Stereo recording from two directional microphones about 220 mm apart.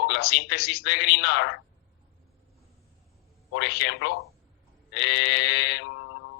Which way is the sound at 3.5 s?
50° left (ahead or behind).